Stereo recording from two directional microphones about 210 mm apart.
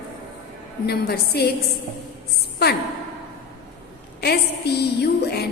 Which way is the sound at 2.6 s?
50° left (ahead or behind).